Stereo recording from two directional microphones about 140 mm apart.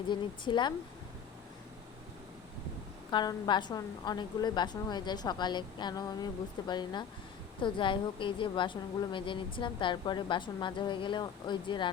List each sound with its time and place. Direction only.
0.1 s a woman's voice: 35° left (ahead or behind)
3.1 s a woman's voice: 30° left (ahead or behind)